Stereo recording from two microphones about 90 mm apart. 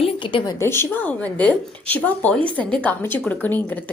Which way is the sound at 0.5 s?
30° left (ahead or behind).